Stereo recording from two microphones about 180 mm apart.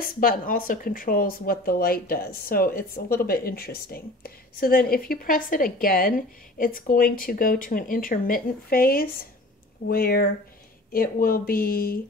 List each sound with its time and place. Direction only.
0.0 s speech: 50° left (ahead or behind)